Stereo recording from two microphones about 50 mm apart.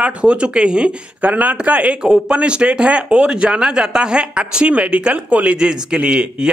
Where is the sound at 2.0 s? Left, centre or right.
Centre.